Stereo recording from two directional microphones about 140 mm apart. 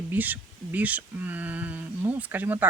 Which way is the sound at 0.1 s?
10° right (ahead or behind).